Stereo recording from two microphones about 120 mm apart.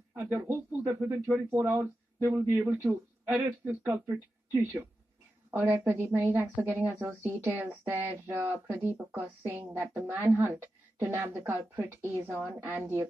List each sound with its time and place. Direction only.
0.3 s speech: 20° right (ahead or behind)